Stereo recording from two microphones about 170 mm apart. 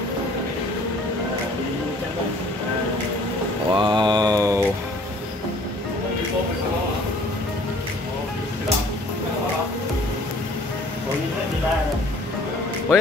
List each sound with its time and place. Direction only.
3.7 s mantra: 25° right (ahead or behind)